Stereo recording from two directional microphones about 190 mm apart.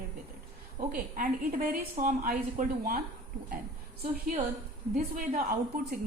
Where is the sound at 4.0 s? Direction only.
50° right (ahead or behind).